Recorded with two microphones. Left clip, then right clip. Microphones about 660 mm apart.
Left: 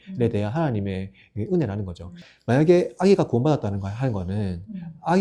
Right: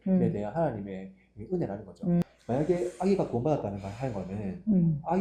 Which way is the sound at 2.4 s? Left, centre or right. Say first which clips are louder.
Left 11 dB; left.